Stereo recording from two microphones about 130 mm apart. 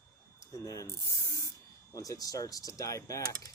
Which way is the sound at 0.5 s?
25° left (ahead or behind).